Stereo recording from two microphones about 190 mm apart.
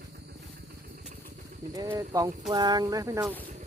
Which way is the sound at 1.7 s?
20° right (ahead or behind).